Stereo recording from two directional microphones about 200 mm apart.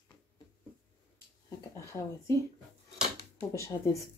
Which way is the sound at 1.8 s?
15° left (ahead or behind).